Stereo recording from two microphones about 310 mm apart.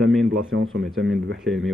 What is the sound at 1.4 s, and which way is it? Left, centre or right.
Speech, centre.